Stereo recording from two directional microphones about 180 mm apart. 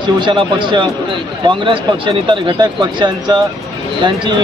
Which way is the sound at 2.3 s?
25° right (ahead or behind).